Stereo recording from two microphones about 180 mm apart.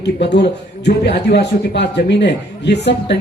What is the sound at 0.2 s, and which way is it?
A man's voice, 70° left (ahead or behind).